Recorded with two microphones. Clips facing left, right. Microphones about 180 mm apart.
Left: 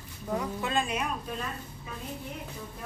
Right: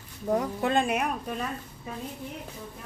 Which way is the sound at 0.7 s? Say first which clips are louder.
Right 5 dB; 60° right (ahead or behind).